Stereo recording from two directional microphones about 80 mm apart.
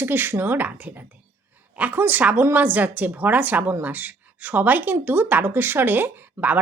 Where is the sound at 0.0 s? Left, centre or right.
Right.